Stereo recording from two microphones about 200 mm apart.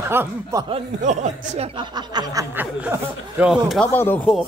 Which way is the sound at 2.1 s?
20° right (ahead or behind).